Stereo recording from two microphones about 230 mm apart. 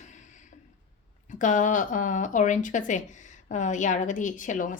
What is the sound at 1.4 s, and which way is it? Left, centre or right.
A woman's voice, left.